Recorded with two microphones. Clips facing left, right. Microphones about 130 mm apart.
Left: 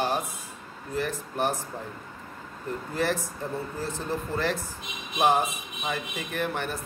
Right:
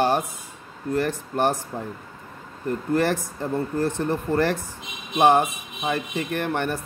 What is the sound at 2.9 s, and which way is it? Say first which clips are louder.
Speech: right 5 dB; 65° right (ahead or behind).